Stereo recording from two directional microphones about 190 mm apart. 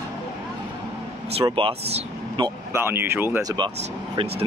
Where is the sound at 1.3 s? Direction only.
30° right (ahead or behind).